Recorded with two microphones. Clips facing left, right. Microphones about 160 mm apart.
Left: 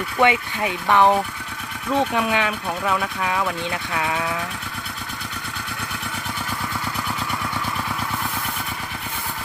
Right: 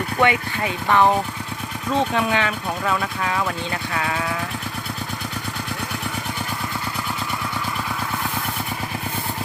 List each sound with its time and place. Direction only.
0.2 s speech: 15° left (ahead or behind)